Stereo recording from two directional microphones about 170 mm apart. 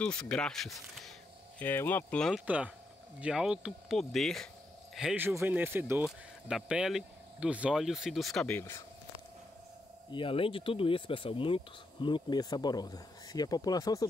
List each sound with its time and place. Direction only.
0.0 s speech: 5° left (ahead or behind)
1.6 s speech: 10° left (ahead or behind)
2.4 s speech: 10° right (ahead or behind)
8.5 s speech: 15° left (ahead or behind)
10.1 s speech: 30° left (ahead or behind)